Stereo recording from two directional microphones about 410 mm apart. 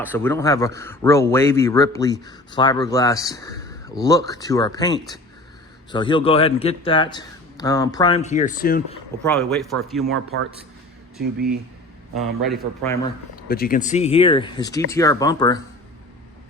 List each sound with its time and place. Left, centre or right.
0.0 s speech: centre
9.2 s a man's voice: centre
11.2 s speech: right
12.4 s a man's voice: centre
13.3 s speech: left